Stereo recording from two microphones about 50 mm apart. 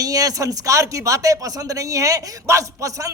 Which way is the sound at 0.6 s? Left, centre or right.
Right.